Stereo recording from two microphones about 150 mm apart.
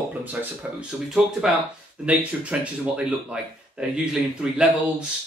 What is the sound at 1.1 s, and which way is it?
Speech, centre (ahead or behind).